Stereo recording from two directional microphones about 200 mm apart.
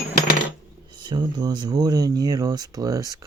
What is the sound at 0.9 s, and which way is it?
Speech, 20° right (ahead or behind).